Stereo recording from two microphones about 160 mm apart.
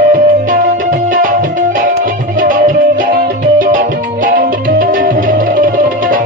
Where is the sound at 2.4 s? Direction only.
55° right (ahead or behind).